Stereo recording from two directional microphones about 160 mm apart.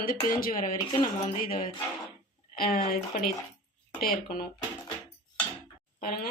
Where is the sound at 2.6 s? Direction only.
65° left (ahead or behind).